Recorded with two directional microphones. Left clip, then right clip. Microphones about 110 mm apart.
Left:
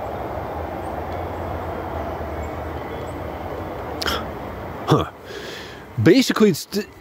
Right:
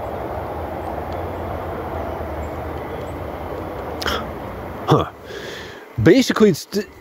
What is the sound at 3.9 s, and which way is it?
Hiccup, 35° left (ahead or behind).